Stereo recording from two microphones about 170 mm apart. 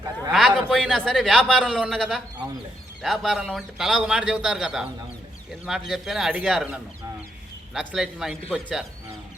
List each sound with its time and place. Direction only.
0.3 s a man's voice: centre (ahead or behind)